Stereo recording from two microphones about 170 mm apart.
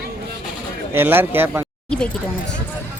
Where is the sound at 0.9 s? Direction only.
15° right (ahead or behind).